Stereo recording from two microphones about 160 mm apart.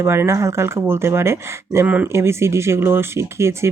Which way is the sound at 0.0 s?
15° right (ahead or behind).